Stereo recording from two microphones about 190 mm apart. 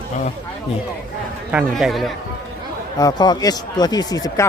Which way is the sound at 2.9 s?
20° left (ahead or behind).